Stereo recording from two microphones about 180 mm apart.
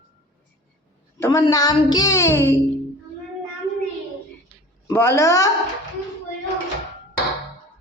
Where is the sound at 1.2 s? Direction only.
20° left (ahead or behind).